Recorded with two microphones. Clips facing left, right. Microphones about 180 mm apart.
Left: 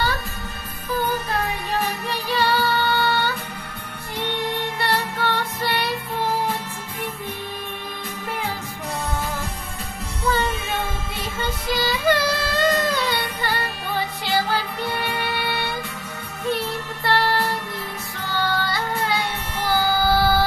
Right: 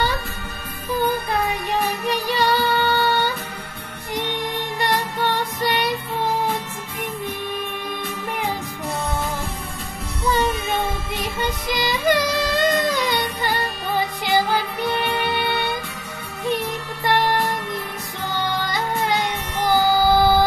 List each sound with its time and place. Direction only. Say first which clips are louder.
1.7 s music: right 3 dB; 15° right (ahead or behind)
11.3 s music: left 1 dB; 15° right (ahead or behind)